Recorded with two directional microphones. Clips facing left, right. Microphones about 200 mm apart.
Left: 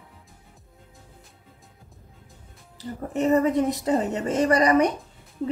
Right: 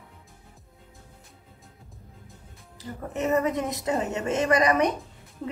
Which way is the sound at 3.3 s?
35° left (ahead or behind).